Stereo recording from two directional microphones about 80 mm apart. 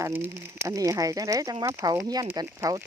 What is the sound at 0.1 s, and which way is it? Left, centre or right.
Speech, right.